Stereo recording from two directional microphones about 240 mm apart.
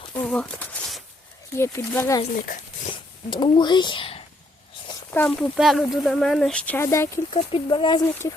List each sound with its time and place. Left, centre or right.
0.1 s a sound: centre
1.5 s speech: centre
2.3 s speech: left
2.9 s speech: centre
5.1 s speech: centre
7.3 s speech: left